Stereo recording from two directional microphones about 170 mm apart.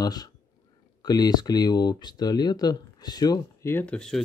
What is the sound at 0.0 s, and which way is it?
Speech, 25° left (ahead or behind).